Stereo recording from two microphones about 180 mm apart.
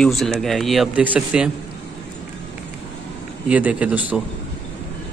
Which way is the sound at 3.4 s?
10° right (ahead or behind).